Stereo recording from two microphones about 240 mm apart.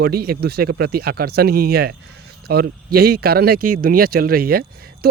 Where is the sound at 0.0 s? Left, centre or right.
Right.